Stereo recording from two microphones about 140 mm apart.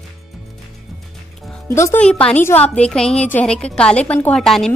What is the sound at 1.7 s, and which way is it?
Speech, 20° left (ahead or behind).